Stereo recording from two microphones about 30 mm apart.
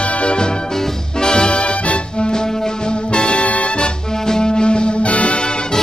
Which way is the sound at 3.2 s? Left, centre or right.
Left.